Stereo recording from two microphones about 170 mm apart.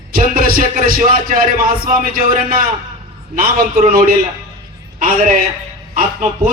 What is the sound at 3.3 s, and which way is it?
Music, 55° right (ahead or behind).